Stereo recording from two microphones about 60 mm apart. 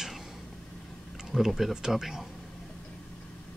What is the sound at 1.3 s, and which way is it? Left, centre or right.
Speech, centre.